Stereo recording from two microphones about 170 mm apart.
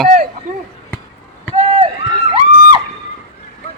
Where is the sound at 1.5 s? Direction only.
35° right (ahead or behind).